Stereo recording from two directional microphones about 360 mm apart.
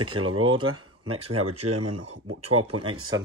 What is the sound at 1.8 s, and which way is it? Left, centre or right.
Speech, right.